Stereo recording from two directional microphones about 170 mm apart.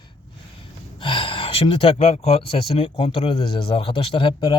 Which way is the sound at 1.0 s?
30° left (ahead or behind).